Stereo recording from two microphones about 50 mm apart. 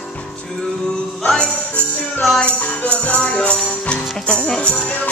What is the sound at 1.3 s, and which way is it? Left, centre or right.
Music, left.